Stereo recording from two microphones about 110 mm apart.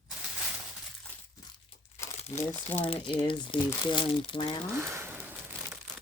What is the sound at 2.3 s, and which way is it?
Speech, 15° left (ahead or behind).